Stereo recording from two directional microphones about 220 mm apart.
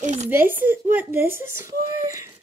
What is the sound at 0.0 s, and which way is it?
Speech, 30° right (ahead or behind).